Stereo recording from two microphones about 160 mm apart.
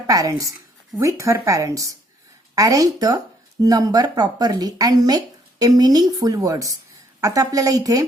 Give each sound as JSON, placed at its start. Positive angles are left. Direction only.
{"t": 0.1, "sound": "speech", "side_deg": -20}